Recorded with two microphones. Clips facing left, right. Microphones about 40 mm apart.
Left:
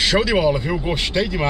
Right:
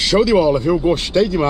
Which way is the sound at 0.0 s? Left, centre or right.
Left.